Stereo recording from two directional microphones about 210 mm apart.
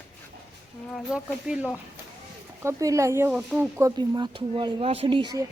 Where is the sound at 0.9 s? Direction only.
5° right (ahead or behind).